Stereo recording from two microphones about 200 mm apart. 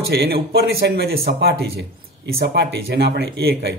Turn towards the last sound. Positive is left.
turn(degrees=-55)  # may be behind; listen again after turning